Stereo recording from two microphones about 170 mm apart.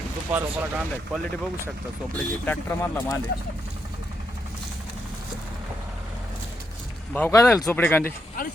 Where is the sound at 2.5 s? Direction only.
10° left (ahead or behind).